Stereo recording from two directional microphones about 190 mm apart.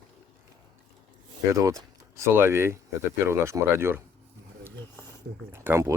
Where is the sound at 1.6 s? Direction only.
20° right (ahead or behind).